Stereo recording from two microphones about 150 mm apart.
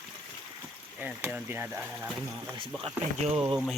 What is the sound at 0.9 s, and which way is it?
Speech, 10° right (ahead or behind).